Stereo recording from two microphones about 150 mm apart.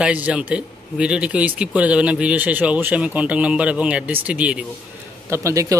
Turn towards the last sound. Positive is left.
turn(degrees=-20)  # may be behind; listen again after turning